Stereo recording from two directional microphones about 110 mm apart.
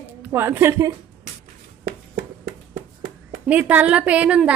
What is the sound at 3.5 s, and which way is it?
A woman's voice, 15° right (ahead or behind).